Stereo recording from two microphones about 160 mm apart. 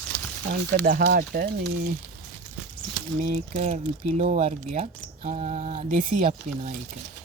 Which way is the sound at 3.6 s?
45° right (ahead or behind).